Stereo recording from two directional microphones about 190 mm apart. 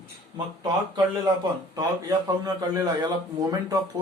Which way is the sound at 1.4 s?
20° right (ahead or behind).